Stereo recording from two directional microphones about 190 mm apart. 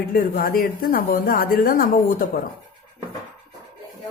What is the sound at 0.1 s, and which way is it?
A woman's voice, 50° left (ahead or behind).